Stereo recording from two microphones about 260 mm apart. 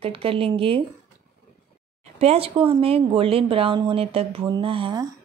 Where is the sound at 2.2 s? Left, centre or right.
Right.